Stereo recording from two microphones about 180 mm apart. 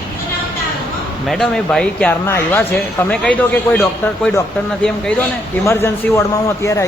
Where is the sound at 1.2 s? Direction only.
Centre (ahead or behind).